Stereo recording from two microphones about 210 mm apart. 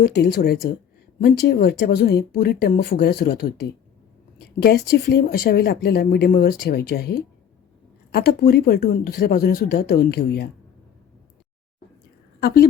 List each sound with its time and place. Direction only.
0.0 s speech: 50° left (ahead or behind)
4.6 s speech: 50° left (ahead or behind)
12.4 s a woman's voice: 45° left (ahead or behind)